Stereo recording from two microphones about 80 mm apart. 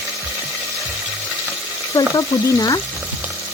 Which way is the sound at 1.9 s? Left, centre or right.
Left.